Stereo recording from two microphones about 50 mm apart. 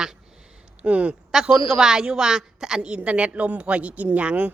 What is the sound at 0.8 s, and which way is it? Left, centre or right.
Speech, right.